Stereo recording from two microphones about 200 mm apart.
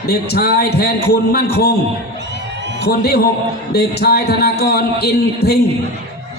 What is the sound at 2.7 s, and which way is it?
A man's voice, 50° left (ahead or behind).